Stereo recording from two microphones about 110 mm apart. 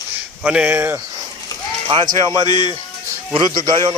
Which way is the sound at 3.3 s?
45° right (ahead or behind).